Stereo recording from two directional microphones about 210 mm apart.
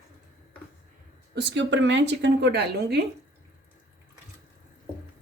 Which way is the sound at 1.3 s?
55° right (ahead or behind).